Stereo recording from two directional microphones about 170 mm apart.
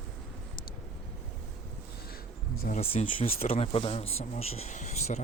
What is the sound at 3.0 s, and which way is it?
Speech, 40° left (ahead or behind).